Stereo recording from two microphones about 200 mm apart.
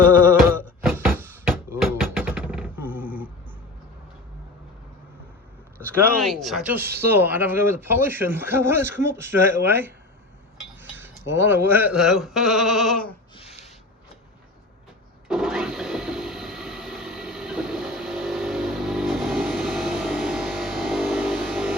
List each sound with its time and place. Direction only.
0.0 s music: 10° right (ahead or behind)
0.8 s vehicle: 10° right (ahead or behind)
6.1 s speech: centre (ahead or behind)
13.3 s a sound: 30° left (ahead or behind)
15.3 s wood: centre (ahead or behind)